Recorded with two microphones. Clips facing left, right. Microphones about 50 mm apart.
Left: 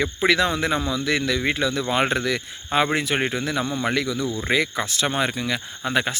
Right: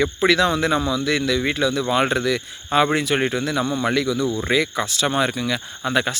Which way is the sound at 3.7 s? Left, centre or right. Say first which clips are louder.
Right 3 dB; centre.